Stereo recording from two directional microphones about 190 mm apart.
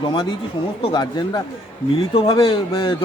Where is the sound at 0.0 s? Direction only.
25° left (ahead or behind).